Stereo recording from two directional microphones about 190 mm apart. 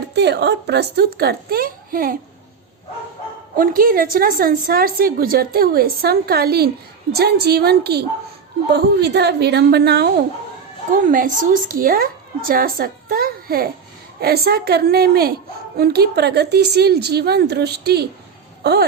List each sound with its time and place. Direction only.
0.1 s speech: 60° right (ahead or behind)
3.6 s a woman's voice: 50° right (ahead or behind)
11.1 s a woman's voice: 45° right (ahead or behind)